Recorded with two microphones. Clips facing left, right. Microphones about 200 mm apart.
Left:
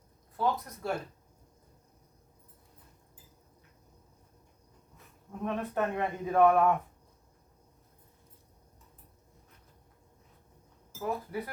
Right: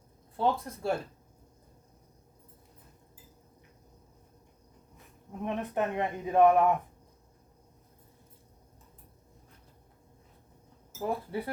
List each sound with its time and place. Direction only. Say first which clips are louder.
0.3 s speech: right 2 dB; 25° right (ahead or behind)
5.4 s speech: even; 20° right (ahead or behind)
11.0 s speech: right 2 dB; 30° right (ahead or behind)